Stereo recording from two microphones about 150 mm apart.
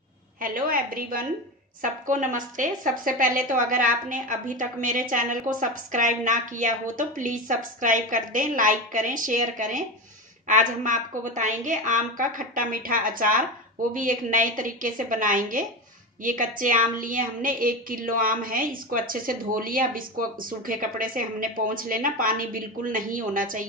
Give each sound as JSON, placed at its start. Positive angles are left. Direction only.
{"t": 0.4, "sound": "a woman's voice", "side_deg": -70}